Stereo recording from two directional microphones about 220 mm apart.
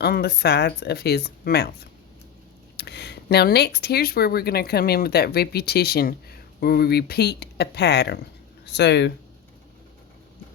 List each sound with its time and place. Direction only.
0.0 s speech: 45° left (ahead or behind)
2.7 s speech: 50° left (ahead or behind)